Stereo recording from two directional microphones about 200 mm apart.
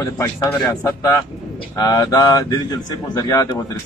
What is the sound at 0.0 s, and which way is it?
A man's voice, 15° left (ahead or behind).